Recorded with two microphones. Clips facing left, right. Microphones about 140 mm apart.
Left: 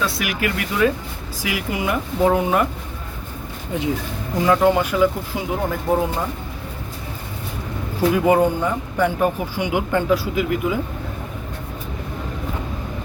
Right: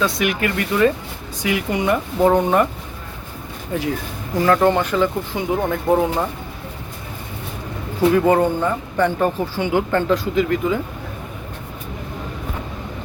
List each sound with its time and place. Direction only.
0.0 s speech: 5° left (ahead or behind)
4.4 s speech: 10° left (ahead or behind)
8.1 s speech: 10° left (ahead or behind)